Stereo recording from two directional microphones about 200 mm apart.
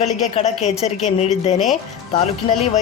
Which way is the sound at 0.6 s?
30° left (ahead or behind).